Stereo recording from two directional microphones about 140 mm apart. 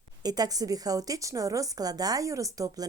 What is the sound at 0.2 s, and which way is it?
Speech, 30° right (ahead or behind).